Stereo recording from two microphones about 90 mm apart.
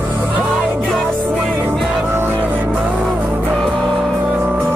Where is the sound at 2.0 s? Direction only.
25° right (ahead or behind).